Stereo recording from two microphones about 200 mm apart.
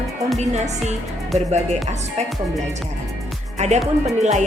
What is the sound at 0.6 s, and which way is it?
A woman's voice, 35° right (ahead or behind).